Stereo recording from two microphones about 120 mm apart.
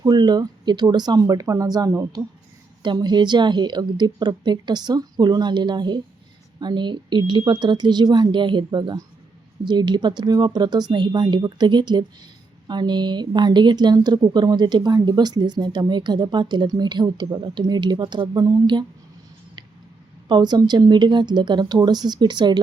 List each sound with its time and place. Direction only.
0.0 s speech: 35° right (ahead or behind)
20.2 s speech: 40° right (ahead or behind)